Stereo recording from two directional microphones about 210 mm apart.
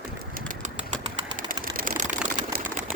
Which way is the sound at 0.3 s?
40° right (ahead or behind).